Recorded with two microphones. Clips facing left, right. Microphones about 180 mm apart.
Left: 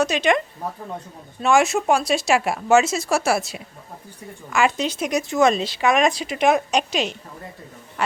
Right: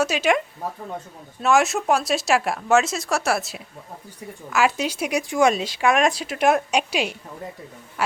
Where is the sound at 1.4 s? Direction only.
Centre (ahead or behind).